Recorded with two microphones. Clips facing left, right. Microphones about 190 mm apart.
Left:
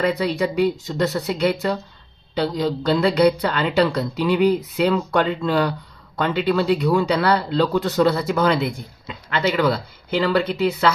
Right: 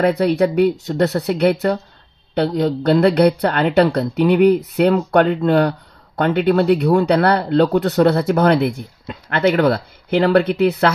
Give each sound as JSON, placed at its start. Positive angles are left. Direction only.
{"t": 0.0, "sound": "speech", "side_deg": -55}